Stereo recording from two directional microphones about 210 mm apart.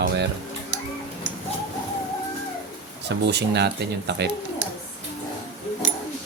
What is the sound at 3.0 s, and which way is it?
Speech, 55° right (ahead or behind).